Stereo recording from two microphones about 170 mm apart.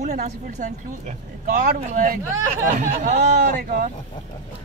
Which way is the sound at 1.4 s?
50° right (ahead or behind).